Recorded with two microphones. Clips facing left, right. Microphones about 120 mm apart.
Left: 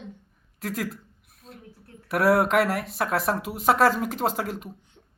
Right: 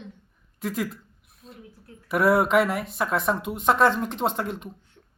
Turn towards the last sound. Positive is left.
turn(degrees=0)  # may be behind; listen again after turning